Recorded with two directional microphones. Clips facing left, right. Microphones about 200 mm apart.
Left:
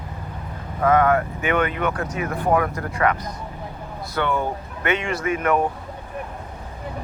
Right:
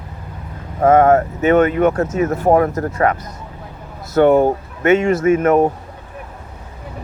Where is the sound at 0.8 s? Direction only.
45° right (ahead or behind).